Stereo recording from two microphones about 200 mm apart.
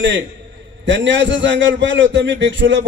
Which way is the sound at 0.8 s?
65° right (ahead or behind).